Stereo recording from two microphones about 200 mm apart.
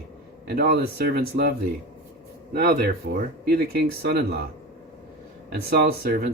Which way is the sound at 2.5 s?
50° right (ahead or behind).